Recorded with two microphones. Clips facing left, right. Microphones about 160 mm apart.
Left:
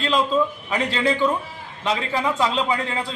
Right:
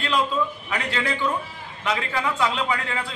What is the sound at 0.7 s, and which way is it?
A man's voice, 30° left (ahead or behind).